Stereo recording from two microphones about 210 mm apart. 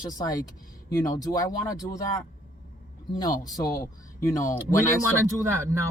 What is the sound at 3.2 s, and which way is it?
Speech, 15° left (ahead or behind).